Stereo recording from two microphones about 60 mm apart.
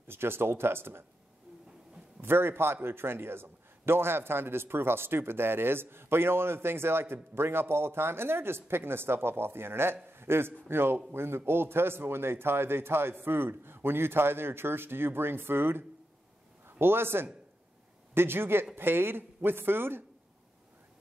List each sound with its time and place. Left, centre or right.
0.1 s a man's voice: right
2.2 s a man's voice: right
16.8 s a man's voice: right